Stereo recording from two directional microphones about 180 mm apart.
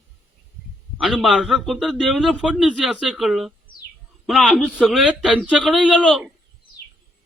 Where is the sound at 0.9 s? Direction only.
Centre (ahead or behind).